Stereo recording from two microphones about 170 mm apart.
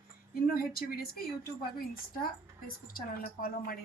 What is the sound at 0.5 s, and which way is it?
Speech, 60° left (ahead or behind).